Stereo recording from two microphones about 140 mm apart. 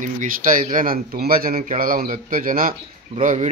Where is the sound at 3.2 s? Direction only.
65° right (ahead or behind).